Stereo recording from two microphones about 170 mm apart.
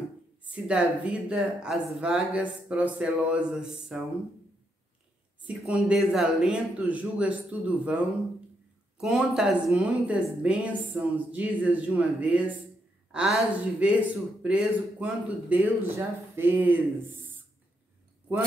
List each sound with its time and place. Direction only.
0.5 s a woman's voice: 5° right (ahead or behind)
5.5 s a woman's voice: 5° right (ahead or behind)